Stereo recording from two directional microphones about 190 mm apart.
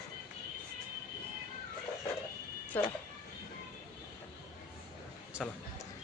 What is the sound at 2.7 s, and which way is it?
Speech, 10° left (ahead or behind).